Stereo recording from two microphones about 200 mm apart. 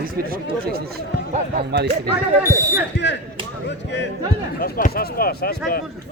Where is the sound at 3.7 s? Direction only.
60° left (ahead or behind).